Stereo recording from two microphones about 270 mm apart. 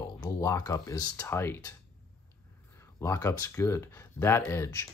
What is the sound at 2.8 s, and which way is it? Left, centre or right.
Speech, centre.